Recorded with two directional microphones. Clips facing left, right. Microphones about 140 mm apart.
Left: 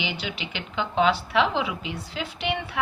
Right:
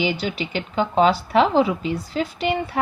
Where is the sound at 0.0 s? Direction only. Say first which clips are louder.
Right 8 dB; 40° right (ahead or behind).